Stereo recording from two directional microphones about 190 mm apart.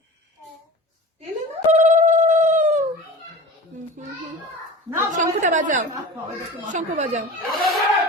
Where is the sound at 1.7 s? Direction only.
35° right (ahead or behind).